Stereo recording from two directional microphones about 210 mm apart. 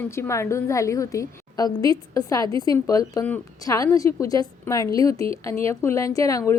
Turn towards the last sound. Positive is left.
turn(degrees=15)  # may be behind; listen again after turning